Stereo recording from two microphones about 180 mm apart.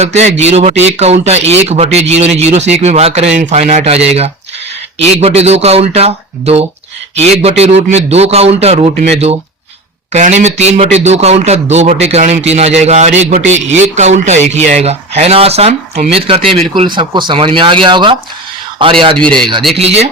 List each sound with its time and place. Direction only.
0.0 s speech: 40° right (ahead or behind)
5.1 s speech: 35° right (ahead or behind)
10.1 s speech: 40° right (ahead or behind)
19.1 s speech: 5° left (ahead or behind)
19.7 s speech: 35° right (ahead or behind)